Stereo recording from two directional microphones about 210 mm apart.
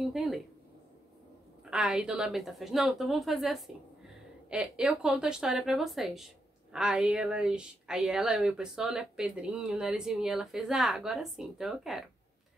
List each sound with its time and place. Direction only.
0.0 s speech: centre (ahead or behind)
1.7 s speech: 5° right (ahead or behind)